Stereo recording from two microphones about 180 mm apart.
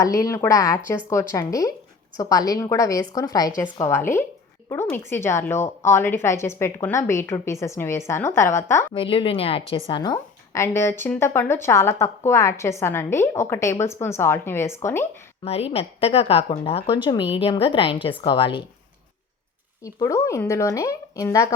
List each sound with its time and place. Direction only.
0.0 s a woman's voice: 20° left (ahead or behind)
8.9 s a woman's voice: 30° left (ahead or behind); by 15.0 s 15° left (ahead or behind)
15.4 s a woman's voice: 35° left (ahead or behind)
19.8 s a woman's voice: 20° left (ahead or behind)